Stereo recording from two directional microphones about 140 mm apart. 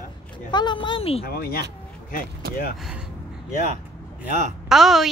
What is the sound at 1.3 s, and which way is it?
Speech, 90° left.